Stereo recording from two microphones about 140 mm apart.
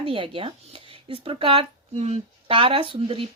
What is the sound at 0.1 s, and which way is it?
Speech, 40° right (ahead or behind).